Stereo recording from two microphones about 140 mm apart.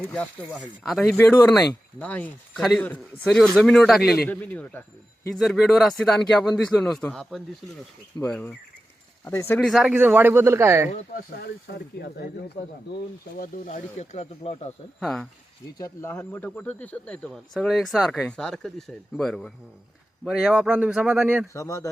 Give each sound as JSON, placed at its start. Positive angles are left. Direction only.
{"t": 0.9, "sound": "speech", "side_deg": 0}
{"t": 4.3, "sound": "speech", "side_deg": 10}
{"t": 5.3, "sound": "speech", "side_deg": 0}
{"t": 9.6, "sound": "speech", "side_deg": 0}
{"t": 13.7, "sound": "speech", "side_deg": 55}
{"t": 15.0, "sound": "speech", "side_deg": 5}
{"t": 15.8, "sound": "speech", "side_deg": 20}
{"t": 21.5, "sound": "speech", "side_deg": 20}